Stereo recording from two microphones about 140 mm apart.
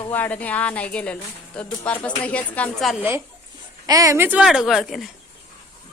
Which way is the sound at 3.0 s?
15° right (ahead or behind).